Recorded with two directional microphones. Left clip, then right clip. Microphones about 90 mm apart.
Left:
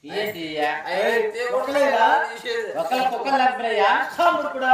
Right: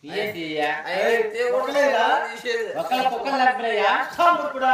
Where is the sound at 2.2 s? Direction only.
55° right (ahead or behind).